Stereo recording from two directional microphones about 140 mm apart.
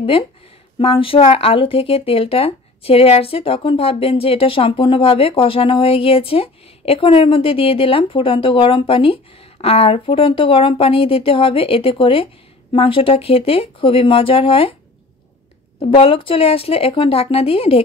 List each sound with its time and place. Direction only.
0.7 s speech: 40° left (ahead or behind)
15.8 s a woman's voice: 40° left (ahead or behind)